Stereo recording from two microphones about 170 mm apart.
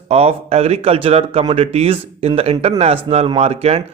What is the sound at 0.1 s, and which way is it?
Speech, 35° right (ahead or behind).